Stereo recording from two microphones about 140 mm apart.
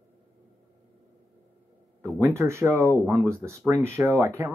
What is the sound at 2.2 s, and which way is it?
Speech, 20° right (ahead or behind).